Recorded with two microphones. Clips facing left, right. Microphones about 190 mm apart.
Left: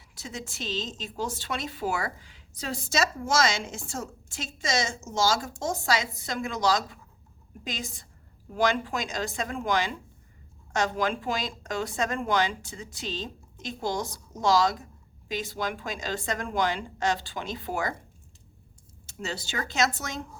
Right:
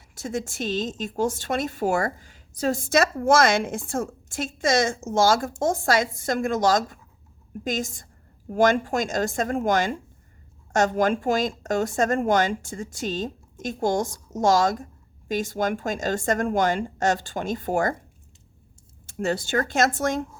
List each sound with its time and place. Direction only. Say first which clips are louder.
0.1 s a woman's voice: right 9 dB; 50° right (ahead or behind)
19.0 s a woman's voice: right 10 dB; 50° right (ahead or behind)